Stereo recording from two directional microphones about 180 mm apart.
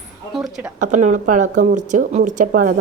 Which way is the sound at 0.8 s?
40° right (ahead or behind).